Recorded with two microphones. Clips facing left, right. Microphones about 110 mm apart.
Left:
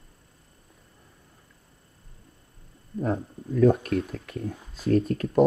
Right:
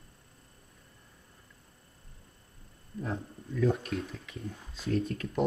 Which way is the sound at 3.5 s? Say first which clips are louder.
Left 9 dB; 55° left (ahead or behind).